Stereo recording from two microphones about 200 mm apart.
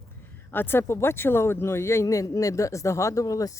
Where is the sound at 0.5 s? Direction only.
10° left (ahead or behind).